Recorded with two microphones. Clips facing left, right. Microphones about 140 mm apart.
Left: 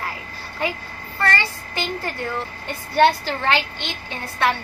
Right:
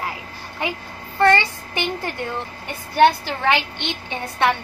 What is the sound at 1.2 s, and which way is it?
Child singing, 20° right (ahead or behind).